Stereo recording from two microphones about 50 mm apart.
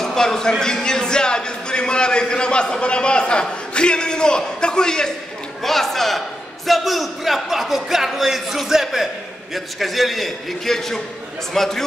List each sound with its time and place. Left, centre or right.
0.0 s a man's voice: centre